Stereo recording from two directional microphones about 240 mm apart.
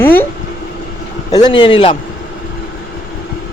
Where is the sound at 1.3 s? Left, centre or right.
Centre.